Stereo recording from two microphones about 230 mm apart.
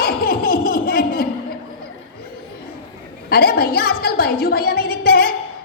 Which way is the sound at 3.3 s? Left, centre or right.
Left.